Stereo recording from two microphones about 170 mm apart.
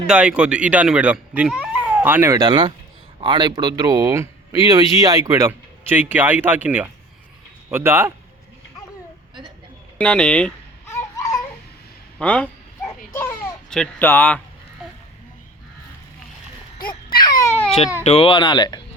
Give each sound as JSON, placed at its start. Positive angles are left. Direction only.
{"t": 0.1, "sound": "speech", "side_deg": -5}
{"t": 10.0, "sound": "a sound", "side_deg": 5}
{"t": 12.2, "sound": "dog", "side_deg": 5}
{"t": 13.1, "sound": "a sound", "side_deg": 20}
{"t": 13.7, "sound": "speech", "side_deg": 10}
{"t": 17.2, "sound": "baby cry", "side_deg": 25}
{"t": 18.0, "sound": "speech", "side_deg": 40}